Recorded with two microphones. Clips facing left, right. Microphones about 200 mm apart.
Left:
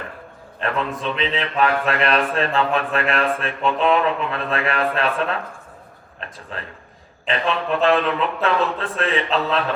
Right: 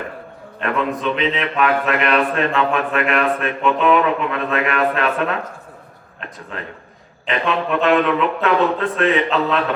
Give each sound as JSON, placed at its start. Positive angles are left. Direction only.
{"t": 0.6, "sound": "a man's voice", "side_deg": 30}
{"t": 6.5, "sound": "a man's voice", "side_deg": 30}